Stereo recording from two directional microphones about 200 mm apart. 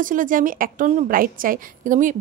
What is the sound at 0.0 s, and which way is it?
A woman's voice, 40° right (ahead or behind).